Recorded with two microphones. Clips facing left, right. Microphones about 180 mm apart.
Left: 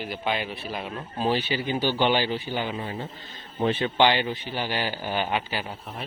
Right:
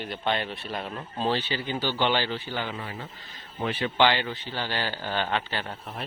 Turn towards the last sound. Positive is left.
turn(degrees=10)  # may be behind; listen again after turning